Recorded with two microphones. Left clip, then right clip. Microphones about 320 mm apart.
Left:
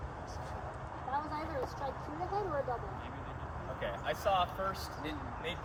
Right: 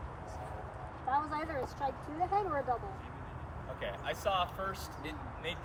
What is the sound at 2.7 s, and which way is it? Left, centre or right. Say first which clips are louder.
Vehicle: right 3 dB; right.